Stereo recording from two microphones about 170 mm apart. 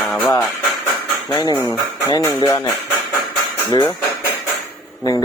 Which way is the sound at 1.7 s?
20° left (ahead or behind).